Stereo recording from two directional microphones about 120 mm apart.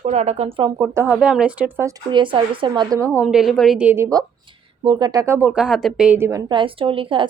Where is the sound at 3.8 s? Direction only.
15° right (ahead or behind).